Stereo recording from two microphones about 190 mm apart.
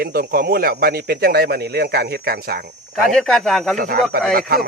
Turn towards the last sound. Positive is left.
turn(degrees=-50)  # may be behind; listen again after turning